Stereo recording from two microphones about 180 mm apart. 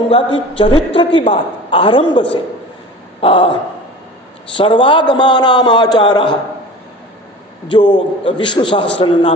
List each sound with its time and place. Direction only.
0.1 s a man's voice: 30° left (ahead or behind)
3.2 s a sound: 30° left (ahead or behind)
4.6 s a man's voice: 25° left (ahead or behind)
7.7 s a man's voice: 25° left (ahead or behind)